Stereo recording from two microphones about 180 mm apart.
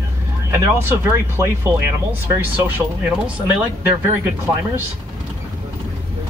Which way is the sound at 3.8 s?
10° right (ahead or behind).